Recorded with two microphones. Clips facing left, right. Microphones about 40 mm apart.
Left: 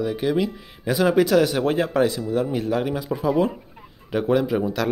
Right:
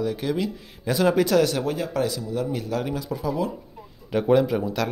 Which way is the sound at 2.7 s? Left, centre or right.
Centre.